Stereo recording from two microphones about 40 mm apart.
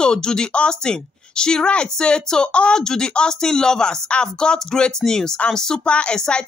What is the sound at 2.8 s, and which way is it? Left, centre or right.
Speech, centre.